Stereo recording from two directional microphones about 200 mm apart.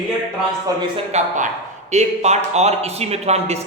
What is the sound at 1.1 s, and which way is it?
A man's voice, 35° right (ahead or behind).